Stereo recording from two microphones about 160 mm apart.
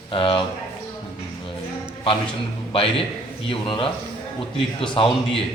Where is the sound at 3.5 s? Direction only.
30° left (ahead or behind).